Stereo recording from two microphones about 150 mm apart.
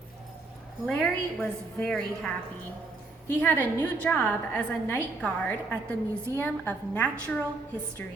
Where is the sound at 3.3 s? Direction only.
10° left (ahead or behind).